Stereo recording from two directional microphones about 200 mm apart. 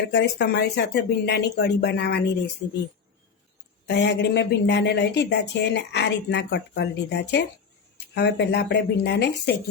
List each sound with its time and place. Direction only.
0.1 s speech: 60° left (ahead or behind)
3.8 s speech: 60° left (ahead or behind)